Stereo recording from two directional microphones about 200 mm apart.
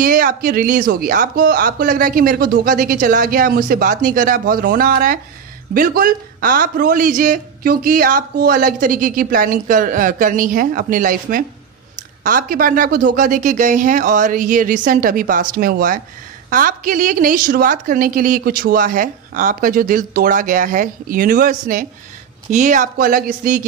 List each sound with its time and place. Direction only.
0.0 s speech: 45° right (ahead or behind)